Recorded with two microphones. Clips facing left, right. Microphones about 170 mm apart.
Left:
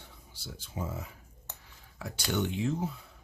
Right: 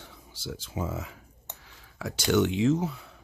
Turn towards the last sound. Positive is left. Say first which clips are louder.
# right 7 dB
turn(degrees=-80)